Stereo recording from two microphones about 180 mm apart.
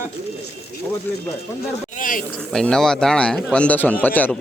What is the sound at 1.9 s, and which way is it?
Speech, 50° left (ahead or behind).